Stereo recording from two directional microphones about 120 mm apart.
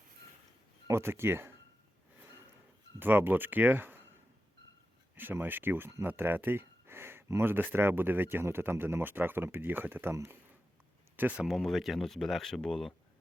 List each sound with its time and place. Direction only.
0.9 s speech: 20° right (ahead or behind)
3.0 s speech: 15° right (ahead or behind)
5.1 s speech: 15° right (ahead or behind)
11.4 s speech: centre (ahead or behind)